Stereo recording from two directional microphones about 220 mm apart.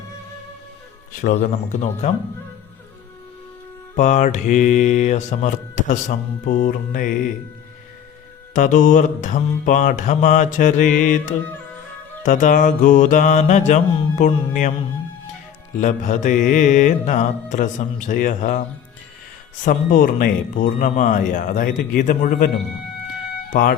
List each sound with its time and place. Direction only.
1.4 s mantra: 30° left (ahead or behind)
3.9 s mantra: 35° left (ahead or behind)
8.5 s mantra: 35° left (ahead or behind)
15.8 s mantra: 35° left (ahead or behind)
19.6 s mantra: 35° left (ahead or behind)
23.5 s speech: 40° left (ahead or behind)